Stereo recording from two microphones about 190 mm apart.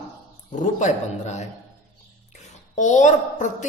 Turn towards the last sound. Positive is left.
turn(degrees=40)  # may be behind; listen again after turning